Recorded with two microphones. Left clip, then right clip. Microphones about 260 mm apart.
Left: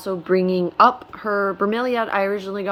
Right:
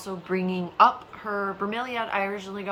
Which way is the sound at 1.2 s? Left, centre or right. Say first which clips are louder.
Left 9 dB; left.